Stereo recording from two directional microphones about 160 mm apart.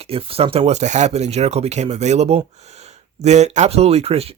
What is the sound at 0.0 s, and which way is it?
Speech, 35° right (ahead or behind).